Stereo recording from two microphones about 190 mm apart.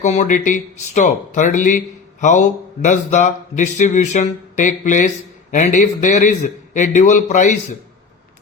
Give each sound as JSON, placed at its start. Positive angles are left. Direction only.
{"t": 0.0, "sound": "speech", "side_deg": 35}